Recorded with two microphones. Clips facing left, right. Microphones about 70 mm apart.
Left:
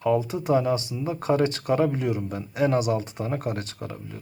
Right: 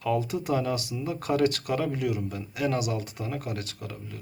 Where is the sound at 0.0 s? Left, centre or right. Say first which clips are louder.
Left 4 dB; left.